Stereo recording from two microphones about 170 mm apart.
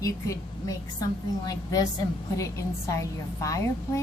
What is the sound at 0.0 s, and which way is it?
A woman's voice, 20° left (ahead or behind).